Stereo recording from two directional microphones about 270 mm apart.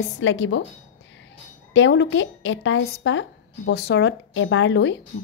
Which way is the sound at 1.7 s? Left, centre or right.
Left.